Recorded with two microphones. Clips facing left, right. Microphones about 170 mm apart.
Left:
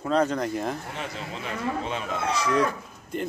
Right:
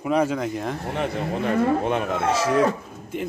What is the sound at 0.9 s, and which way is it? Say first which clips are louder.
Speech: right 9 dB; 55° right (ahead or behind).